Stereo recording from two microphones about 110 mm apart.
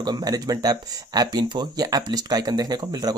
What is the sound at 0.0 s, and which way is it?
Speech, 40° right (ahead or behind).